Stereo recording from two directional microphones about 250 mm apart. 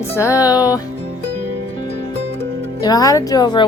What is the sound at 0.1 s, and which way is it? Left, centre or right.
Speech, centre.